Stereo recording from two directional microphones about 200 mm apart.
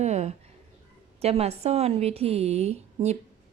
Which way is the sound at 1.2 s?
30° right (ahead or behind).